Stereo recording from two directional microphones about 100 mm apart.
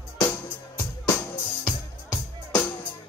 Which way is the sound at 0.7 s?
20° left (ahead or behind).